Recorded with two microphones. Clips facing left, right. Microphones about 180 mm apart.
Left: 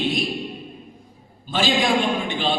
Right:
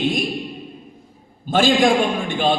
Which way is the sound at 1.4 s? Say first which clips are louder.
Right 6 dB; 50° right (ahead or behind).